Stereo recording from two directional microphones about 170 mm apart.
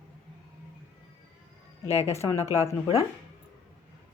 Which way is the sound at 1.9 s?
40° left (ahead or behind).